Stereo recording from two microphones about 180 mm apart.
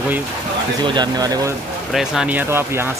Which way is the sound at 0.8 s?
25° right (ahead or behind).